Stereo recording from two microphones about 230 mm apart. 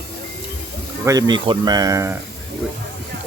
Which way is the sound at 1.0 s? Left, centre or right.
Centre.